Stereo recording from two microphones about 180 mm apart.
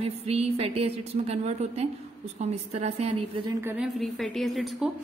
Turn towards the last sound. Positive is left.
turn(degrees=-5)  # may be behind; listen again after turning